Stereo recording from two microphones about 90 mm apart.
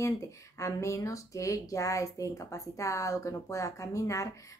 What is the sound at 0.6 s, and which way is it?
A woman's voice, 35° left (ahead or behind).